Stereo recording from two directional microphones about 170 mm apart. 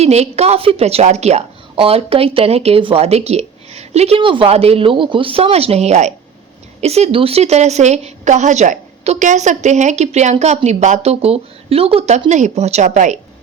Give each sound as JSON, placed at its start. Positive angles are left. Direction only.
{"t": 0.0, "sound": "a woman's voice", "side_deg": -40}